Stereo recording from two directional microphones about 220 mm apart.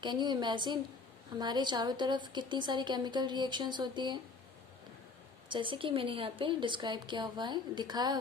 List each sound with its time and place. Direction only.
0.0 s a woman's voice: 20° right (ahead or behind)
5.5 s a woman's voice: 20° right (ahead or behind)